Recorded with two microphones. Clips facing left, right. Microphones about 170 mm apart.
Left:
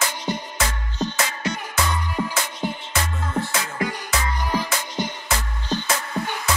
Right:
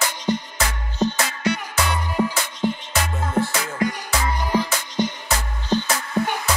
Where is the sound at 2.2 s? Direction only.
45° right (ahead or behind).